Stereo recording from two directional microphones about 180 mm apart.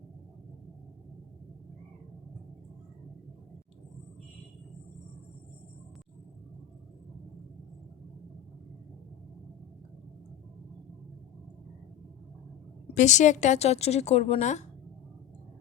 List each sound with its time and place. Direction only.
12.9 s a woman's voice: 40° left (ahead or behind)